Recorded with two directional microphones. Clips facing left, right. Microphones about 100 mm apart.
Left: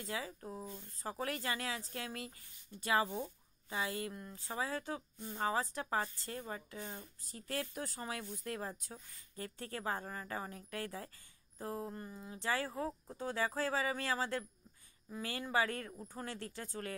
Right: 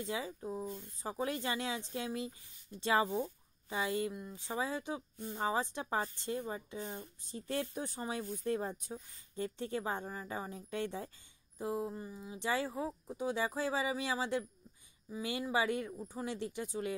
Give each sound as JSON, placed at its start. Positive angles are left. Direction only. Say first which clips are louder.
{"t": 0.0, "sound": "speech", "louder": "right 4 dB", "side_deg": -20}
{"t": 4.1, "sound": "speech", "louder": "right 3 dB", "side_deg": -10}
{"t": 4.4, "sound": "speech", "louder": "right 2 dB", "side_deg": -20}
{"t": 11.5, "sound": "speech", "louder": "right 5 dB", "side_deg": -10}
{"t": 12.4, "sound": "speech", "louder": "right 2 dB", "side_deg": -20}
{"t": 13.3, "sound": "speech", "louder": "right 1 dB", "side_deg": -20}
{"t": 15.5, "sound": "speech", "louder": "right 1 dB", "side_deg": -15}